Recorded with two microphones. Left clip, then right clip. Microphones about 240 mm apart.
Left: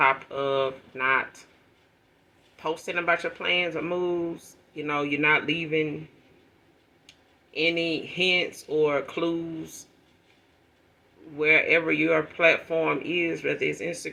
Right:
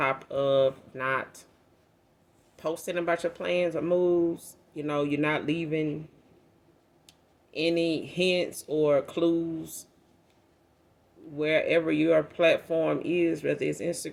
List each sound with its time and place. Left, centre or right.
0.0 s speech: right
2.6 s speech: right
7.1 s speech: right
11.3 s speech: right